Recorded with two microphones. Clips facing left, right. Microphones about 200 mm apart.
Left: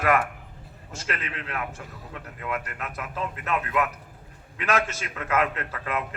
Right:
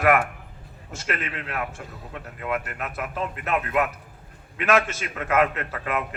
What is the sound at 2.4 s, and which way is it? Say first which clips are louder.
Speech: right 3 dB; 35° right (ahead or behind).